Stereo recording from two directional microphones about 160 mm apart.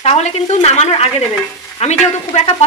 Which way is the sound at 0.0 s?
40° left (ahead or behind).